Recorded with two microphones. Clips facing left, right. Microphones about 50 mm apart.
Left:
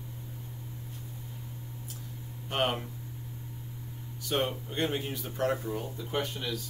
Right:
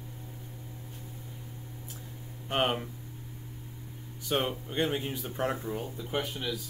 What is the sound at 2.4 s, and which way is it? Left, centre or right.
Speech, centre.